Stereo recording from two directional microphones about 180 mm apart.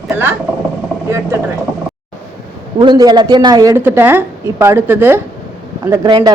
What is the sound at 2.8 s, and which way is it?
A woman's voice, 25° right (ahead or behind).